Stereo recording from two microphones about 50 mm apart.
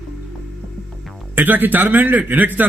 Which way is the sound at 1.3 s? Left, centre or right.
Right.